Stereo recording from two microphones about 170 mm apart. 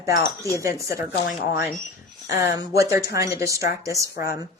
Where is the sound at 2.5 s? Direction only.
20° right (ahead or behind).